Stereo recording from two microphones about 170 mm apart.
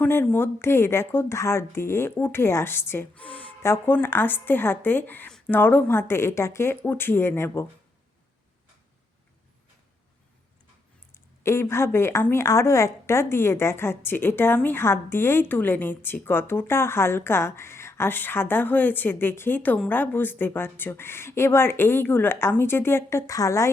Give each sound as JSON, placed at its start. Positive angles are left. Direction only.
{"t": 0.0, "sound": "a woman's voice", "side_deg": 10}
{"t": 11.1, "sound": "a woman's voice", "side_deg": 15}